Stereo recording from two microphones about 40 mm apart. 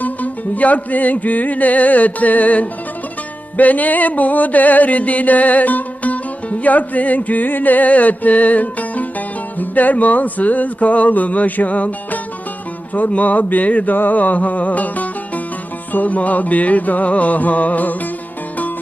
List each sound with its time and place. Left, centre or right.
0.0 s music: left
13.9 s music: left